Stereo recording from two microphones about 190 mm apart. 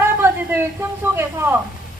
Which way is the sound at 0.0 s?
10° right (ahead or behind).